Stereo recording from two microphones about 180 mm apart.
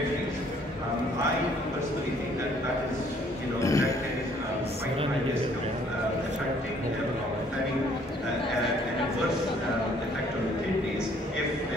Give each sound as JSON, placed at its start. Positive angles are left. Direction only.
{"t": 3.6, "sound": "music", "side_deg": 15}